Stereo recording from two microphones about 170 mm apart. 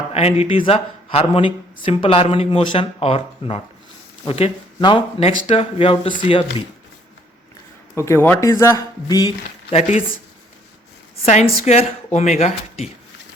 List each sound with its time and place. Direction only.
0.1 s a man's voice: 40° left (ahead or behind)
7.9 s speech: 15° left (ahead or behind)
11.3 s a man's voice: 40° left (ahead or behind)